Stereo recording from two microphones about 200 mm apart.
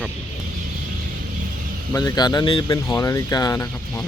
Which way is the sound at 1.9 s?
15° left (ahead or behind).